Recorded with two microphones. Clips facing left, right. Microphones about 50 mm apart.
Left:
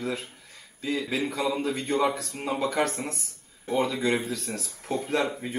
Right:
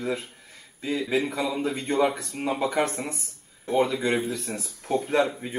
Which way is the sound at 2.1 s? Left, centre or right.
Right.